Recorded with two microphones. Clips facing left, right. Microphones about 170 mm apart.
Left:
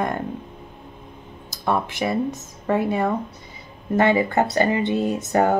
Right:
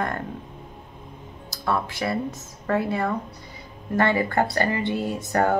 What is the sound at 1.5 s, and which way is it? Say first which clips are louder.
Speech: left 3 dB; 20° left (ahead or behind).